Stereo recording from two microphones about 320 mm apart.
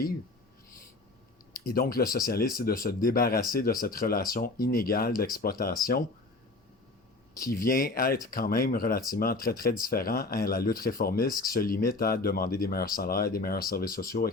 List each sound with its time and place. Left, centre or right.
1.5 s speech: left
7.5 s speech: left